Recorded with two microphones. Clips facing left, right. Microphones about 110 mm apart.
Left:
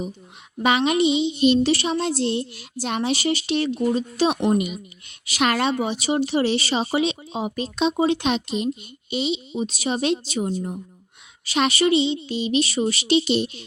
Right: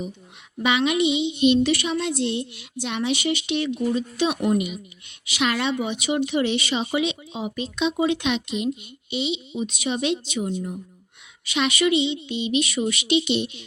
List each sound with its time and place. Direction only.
0.6 s speech: 40° left (ahead or behind)
4.5 s speech: 45° left (ahead or behind)